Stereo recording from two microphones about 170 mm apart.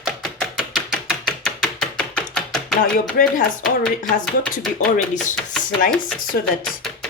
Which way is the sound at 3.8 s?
5° left (ahead or behind).